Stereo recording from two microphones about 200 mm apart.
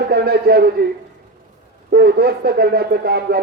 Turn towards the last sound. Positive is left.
turn(degrees=-55)  # may be behind; listen again after turning